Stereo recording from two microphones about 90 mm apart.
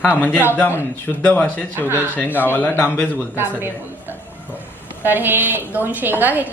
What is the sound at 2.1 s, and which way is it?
Speech, 20° left (ahead or behind).